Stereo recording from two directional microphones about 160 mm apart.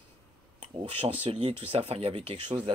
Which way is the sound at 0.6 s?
35° right (ahead or behind).